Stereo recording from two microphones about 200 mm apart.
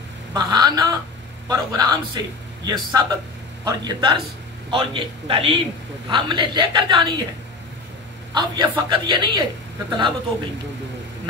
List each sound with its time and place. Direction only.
0.3 s a woman's voice: 20° right (ahead or behind)
8.4 s a woman's voice: 20° right (ahead or behind)